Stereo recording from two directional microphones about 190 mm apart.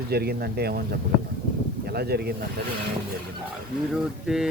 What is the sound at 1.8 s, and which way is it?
Speech, 55° right (ahead or behind).